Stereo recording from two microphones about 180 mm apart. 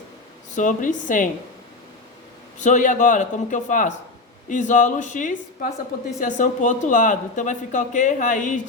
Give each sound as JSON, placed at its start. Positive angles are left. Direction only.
{"t": 0.5, "sound": "speech", "side_deg": 45}
{"t": 2.6, "sound": "speech", "side_deg": 45}